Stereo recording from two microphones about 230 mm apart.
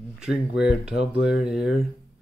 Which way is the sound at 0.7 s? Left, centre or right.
Centre.